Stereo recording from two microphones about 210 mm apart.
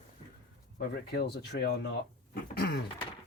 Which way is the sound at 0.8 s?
50° left (ahead or behind).